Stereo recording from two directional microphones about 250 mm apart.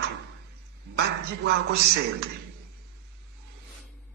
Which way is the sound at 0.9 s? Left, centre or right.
Right.